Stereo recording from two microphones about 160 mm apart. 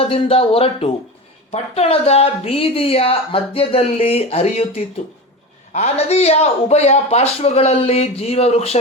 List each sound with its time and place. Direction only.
0.0 s speech: 35° left (ahead or behind)